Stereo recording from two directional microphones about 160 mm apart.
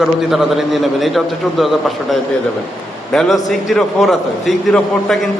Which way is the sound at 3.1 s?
Centre (ahead or behind).